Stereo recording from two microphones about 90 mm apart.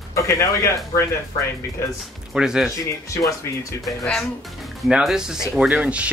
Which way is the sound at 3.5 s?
25° left (ahead or behind).